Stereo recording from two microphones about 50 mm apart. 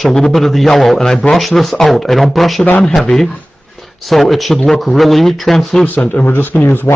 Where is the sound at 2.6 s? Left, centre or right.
Left.